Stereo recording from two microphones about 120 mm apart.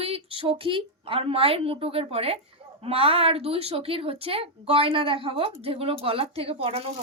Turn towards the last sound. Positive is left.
turn(degrees=-55)  # may be behind; listen again after turning